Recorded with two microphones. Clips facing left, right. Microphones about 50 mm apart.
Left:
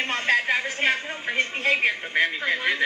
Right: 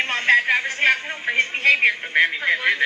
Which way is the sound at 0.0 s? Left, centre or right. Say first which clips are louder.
Right 5 dB; right.